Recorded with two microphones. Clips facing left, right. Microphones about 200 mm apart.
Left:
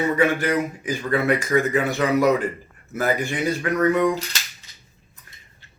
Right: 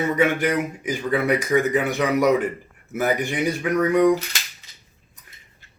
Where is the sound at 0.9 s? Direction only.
15° right (ahead or behind).